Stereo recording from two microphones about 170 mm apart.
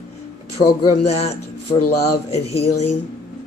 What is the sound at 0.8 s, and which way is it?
Speech, 35° left (ahead or behind).